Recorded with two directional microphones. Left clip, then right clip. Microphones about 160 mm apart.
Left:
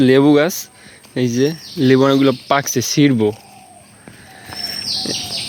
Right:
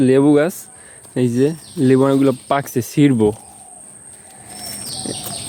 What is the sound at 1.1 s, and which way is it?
Speech, 20° right (ahead or behind).